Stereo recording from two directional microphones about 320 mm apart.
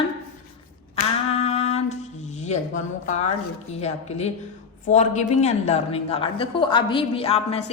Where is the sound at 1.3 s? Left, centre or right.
Left.